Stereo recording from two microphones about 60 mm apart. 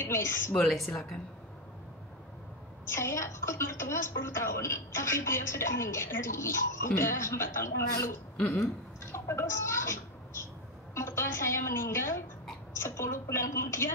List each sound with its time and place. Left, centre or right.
0.0 s a woman's voice: left
0.7 s speech: centre
2.9 s a woman's voice: left
9.1 s a woman's voice: left